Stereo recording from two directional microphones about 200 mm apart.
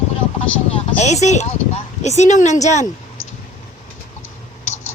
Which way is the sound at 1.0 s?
35° left (ahead or behind).